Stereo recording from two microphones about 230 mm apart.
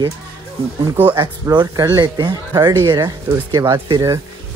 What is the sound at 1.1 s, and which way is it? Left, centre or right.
Speech, centre.